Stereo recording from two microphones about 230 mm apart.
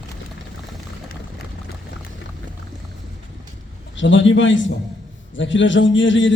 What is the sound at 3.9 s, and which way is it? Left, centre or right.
A man's voice, left.